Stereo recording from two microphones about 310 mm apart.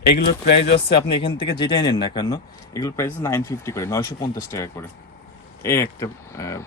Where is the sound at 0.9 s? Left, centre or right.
Centre.